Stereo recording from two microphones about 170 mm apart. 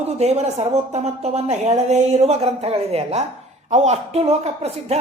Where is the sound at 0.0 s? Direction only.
40° right (ahead or behind).